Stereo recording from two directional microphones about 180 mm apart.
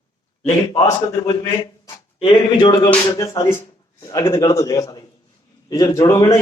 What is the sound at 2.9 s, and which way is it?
Music, 15° left (ahead or behind).